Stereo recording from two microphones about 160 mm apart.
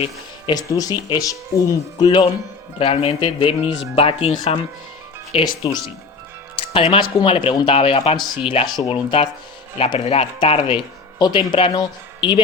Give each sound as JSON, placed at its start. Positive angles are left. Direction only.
{"t": 0.0, "sound": "speech", "side_deg": 30}
{"t": 2.7, "sound": "speech", "side_deg": 35}
{"t": 6.7, "sound": "speech", "side_deg": 40}